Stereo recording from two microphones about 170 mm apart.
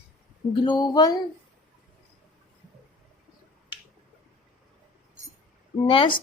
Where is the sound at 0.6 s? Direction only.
25° left (ahead or behind).